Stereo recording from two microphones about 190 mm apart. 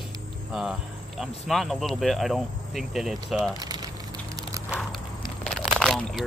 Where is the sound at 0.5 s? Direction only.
5° right (ahead or behind).